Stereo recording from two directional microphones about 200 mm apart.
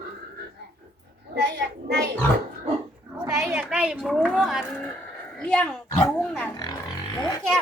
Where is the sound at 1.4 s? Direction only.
55° right (ahead or behind).